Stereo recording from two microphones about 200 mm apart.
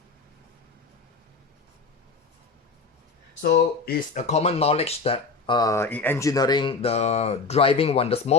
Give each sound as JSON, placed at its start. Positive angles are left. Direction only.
{"t": 3.5, "sound": "speech", "side_deg": 40}